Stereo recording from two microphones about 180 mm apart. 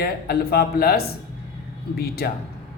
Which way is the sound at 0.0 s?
60° left (ahead or behind).